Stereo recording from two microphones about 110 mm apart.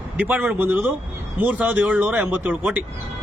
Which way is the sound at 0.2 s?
15° right (ahead or behind).